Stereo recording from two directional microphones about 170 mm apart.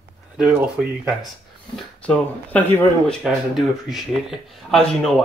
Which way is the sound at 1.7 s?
5° left (ahead or behind).